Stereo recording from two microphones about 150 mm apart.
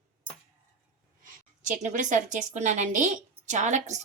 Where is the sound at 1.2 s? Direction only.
60° right (ahead or behind).